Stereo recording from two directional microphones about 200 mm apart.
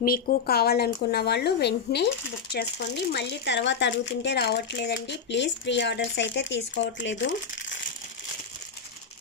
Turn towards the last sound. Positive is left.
turn(degrees=65)  # may be behind; listen again after turning